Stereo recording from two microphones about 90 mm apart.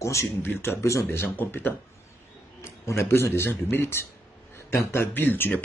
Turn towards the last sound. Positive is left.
turn(degrees=20)  # may be behind; listen again after turning